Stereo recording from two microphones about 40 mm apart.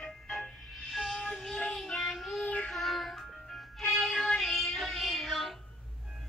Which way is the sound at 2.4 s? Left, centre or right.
Left.